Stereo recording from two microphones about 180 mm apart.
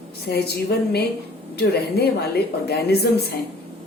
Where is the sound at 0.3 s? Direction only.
60° left (ahead or behind).